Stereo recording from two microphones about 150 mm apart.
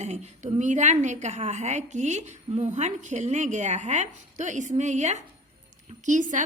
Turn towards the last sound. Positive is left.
turn(degrees=-55)  # may be behind; listen again after turning